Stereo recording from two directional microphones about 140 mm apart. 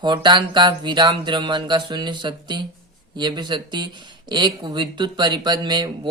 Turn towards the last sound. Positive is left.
turn(degrees=-30)  # may be behind; listen again after turning